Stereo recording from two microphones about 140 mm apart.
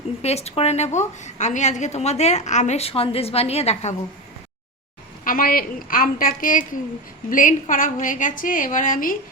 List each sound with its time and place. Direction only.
0.2 s a woman's voice: 50° left (ahead or behind)
5.2 s a woman's voice: 90° left